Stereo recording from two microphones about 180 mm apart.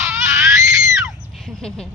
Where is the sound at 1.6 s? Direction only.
5° left (ahead or behind).